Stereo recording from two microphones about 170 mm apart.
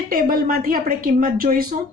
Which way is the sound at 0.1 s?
60° right (ahead or behind).